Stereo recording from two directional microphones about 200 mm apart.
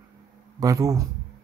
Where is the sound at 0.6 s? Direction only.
15° right (ahead or behind).